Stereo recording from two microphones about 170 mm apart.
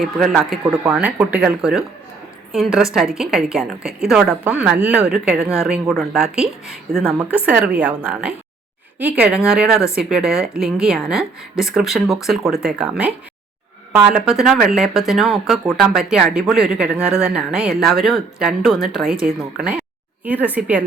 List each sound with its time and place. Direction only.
0.0 s a woman's voice: centre (ahead or behind)